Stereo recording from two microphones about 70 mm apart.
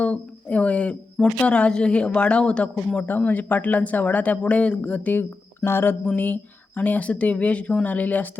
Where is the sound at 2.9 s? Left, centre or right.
Left.